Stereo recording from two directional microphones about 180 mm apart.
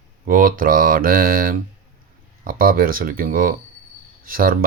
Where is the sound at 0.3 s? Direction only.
50° right (ahead or behind).